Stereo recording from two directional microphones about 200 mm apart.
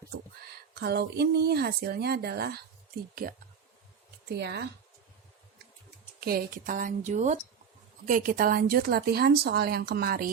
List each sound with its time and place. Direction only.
0.5 s speech: 55° right (ahead or behind)
6.1 s speech: 50° right (ahead or behind)